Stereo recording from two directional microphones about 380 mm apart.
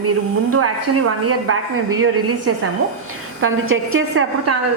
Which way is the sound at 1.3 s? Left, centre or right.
Right.